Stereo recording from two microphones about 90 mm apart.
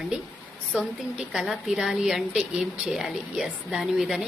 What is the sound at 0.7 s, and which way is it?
A woman's voice, 5° right (ahead or behind).